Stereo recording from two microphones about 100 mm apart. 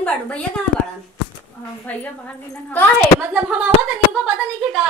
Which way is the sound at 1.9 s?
15° left (ahead or behind).